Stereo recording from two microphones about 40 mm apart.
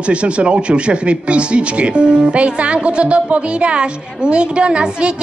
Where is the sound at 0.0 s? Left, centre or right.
Right.